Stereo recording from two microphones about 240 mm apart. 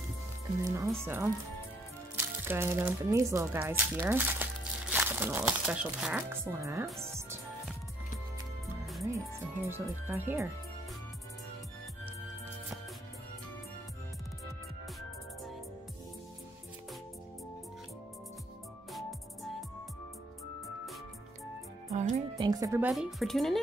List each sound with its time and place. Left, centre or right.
0.7 s speech: centre
6.9 s speech: centre
9.7 s speech: centre
18.9 s music: centre
21.9 s music: right
22.4 s music: centre
22.8 s speech: centre